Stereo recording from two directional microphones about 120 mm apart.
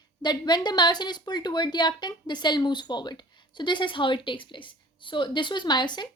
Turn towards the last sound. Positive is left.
turn(degrees=40)  # may be behind; listen again after turning